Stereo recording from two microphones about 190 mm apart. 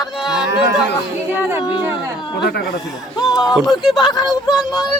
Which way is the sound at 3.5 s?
Centre (ahead or behind).